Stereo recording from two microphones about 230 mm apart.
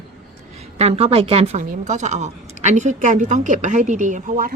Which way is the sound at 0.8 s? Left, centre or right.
Right.